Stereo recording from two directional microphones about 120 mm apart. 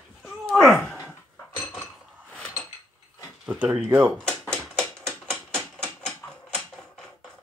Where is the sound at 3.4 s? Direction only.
10° right (ahead or behind).